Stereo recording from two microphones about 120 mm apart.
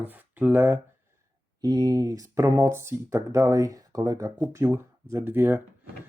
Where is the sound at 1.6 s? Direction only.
35° right (ahead or behind).